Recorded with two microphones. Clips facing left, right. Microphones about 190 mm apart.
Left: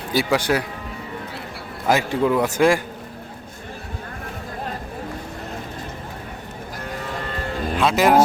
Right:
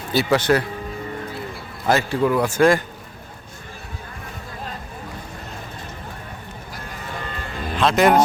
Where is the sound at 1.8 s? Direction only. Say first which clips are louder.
Even; 15° left (ahead or behind).